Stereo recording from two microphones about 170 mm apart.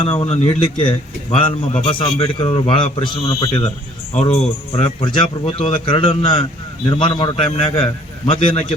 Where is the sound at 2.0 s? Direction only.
30° left (ahead or behind).